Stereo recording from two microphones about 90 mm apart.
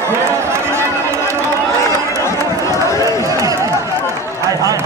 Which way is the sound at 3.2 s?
40° right (ahead or behind).